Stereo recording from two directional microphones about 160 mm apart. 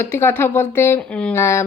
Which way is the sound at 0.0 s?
15° left (ahead or behind).